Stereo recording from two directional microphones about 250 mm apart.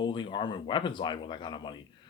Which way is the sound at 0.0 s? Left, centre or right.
Centre.